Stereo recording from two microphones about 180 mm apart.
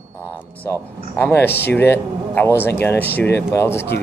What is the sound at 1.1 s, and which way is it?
Speech, 10° left (ahead or behind).